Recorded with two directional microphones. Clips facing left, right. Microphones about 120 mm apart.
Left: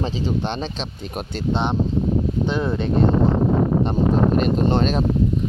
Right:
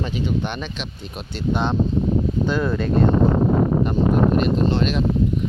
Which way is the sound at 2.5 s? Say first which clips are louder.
Right 2 dB; 25° left (ahead or behind).